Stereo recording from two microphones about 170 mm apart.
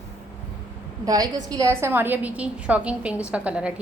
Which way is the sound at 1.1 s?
20° right (ahead or behind).